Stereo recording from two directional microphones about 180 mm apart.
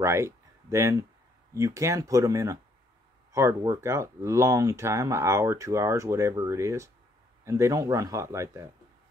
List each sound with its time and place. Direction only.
0.0 s speech: 15° right (ahead or behind)